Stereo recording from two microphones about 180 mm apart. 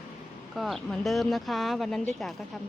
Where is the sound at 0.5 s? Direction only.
Centre (ahead or behind).